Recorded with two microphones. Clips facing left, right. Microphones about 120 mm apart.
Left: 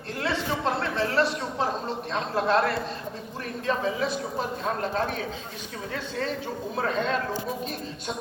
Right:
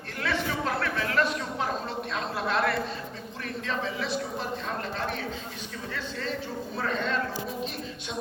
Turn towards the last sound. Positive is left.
turn(degrees=45)  # may be behind; listen again after turning